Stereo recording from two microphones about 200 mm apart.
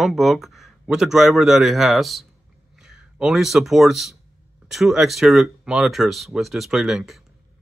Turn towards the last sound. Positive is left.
turn(degrees=0)  # may be behind; listen again after turning